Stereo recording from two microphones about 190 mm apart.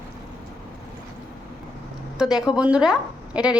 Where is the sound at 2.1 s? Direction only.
5° right (ahead or behind).